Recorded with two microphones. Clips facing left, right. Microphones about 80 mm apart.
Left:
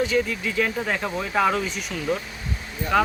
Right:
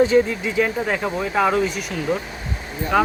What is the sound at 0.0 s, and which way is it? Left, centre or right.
Speech, right.